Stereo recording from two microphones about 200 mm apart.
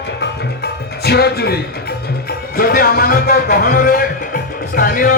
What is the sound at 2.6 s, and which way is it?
Speech, 50° left (ahead or behind).